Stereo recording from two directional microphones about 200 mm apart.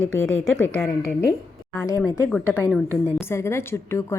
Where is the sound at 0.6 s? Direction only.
5° left (ahead or behind).